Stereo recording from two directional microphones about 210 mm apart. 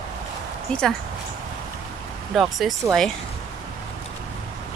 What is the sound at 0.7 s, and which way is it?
Speech, 5° left (ahead or behind).